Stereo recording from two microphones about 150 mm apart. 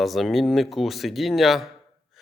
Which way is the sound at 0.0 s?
Centre (ahead or behind).